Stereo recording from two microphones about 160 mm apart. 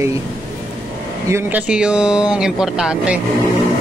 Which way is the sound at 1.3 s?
10° right (ahead or behind).